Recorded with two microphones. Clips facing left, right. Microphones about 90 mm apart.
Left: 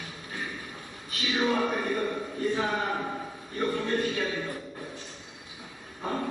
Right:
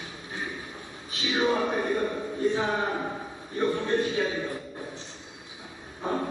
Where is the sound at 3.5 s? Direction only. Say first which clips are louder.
Right 3 dB; 25° right (ahead or behind).